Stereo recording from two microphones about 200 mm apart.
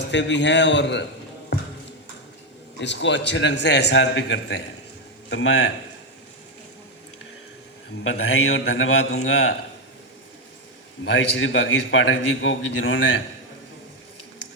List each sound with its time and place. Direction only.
0.0 s a man's voice: 60° left (ahead or behind)
2.7 s a man's voice: 65° left (ahead or behind)
8.5 s a man's voice: 80° left
11.0 s a man's voice: 70° left (ahead or behind)